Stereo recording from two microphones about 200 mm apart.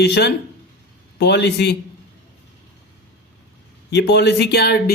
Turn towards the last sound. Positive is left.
turn(degrees=55)  # may be behind; listen again after turning